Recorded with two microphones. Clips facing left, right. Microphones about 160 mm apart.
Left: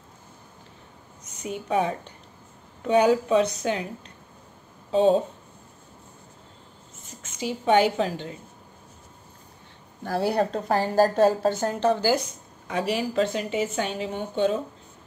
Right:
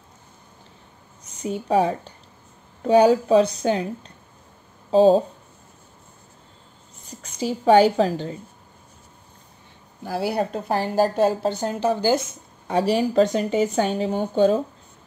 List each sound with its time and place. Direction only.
1.2 s a woman's voice: 35° right (ahead or behind)
4.9 s a woman's voice: 35° right (ahead or behind)
7.3 s a woman's voice: 35° right (ahead or behind)
10.0 s a woman's voice: 5° right (ahead or behind)
12.6 s a woman's voice: 35° right (ahead or behind)